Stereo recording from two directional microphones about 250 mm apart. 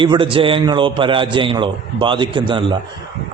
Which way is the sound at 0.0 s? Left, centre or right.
Centre.